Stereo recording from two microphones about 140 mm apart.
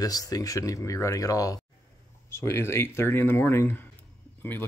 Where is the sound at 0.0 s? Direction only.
25° left (ahead or behind).